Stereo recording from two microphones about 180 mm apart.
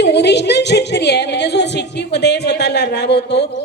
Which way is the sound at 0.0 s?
70° left (ahead or behind).